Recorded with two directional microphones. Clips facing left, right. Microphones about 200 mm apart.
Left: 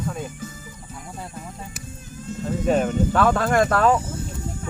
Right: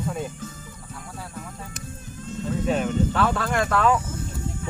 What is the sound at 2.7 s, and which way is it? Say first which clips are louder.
Speech: left 4 dB; 45° left (ahead or behind).